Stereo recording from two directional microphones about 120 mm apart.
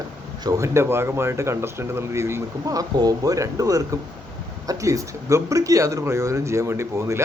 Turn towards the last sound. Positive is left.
turn(degrees=-20)  # may be behind; listen again after turning